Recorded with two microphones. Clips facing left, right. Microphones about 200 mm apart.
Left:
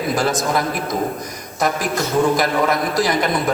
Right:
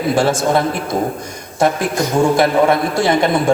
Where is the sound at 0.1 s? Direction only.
30° right (ahead or behind).